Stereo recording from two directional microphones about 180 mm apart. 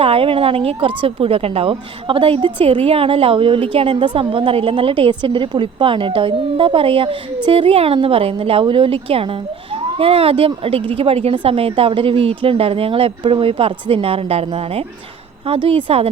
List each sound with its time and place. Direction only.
0.0 s speech: 30° right (ahead or behind)